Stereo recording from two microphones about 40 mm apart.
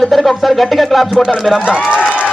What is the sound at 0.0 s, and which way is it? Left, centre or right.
A man's voice, centre.